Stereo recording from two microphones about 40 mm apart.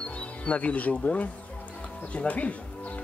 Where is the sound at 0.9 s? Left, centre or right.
Left.